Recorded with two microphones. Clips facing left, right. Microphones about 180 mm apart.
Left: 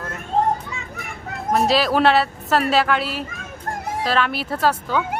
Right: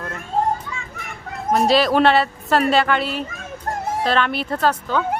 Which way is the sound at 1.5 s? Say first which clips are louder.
Right 2 dB; centre (ahead or behind).